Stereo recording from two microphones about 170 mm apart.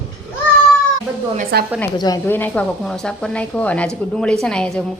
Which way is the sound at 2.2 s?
10° left (ahead or behind).